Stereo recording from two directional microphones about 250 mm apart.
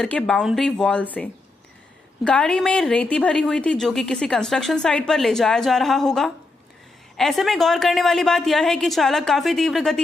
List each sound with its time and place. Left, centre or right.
0.0 s a woman's voice: centre
2.2 s a woman's voice: centre